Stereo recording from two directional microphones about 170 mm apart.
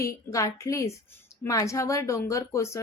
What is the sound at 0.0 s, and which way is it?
Speech, 20° left (ahead or behind).